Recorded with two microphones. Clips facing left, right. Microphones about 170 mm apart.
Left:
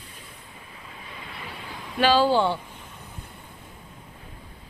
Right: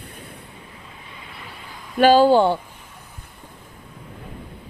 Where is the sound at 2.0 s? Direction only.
45° right (ahead or behind).